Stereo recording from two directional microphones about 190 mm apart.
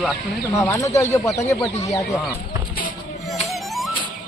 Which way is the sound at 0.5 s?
15° left (ahead or behind).